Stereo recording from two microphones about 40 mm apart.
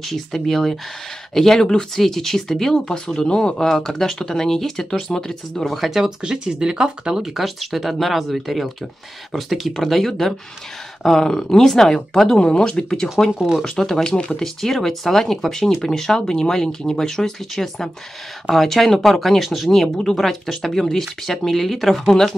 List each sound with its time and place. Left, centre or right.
0.0 s speech: centre; by 3.6 s left
3.6 s speech: centre
5.6 s speech: centre
6.0 s speech: centre
7.3 s speech: centre
12.4 s speech: left
13.3 s speech: right
13.7 s speech: centre
14.6 s speech: centre